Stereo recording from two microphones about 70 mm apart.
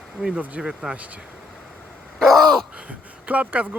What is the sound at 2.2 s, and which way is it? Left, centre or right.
Groan, centre.